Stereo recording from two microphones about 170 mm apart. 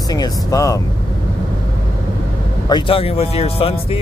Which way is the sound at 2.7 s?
30° left (ahead or behind).